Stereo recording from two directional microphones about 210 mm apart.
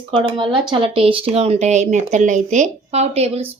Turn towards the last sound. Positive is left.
turn(degrees=-30)  # may be behind; listen again after turning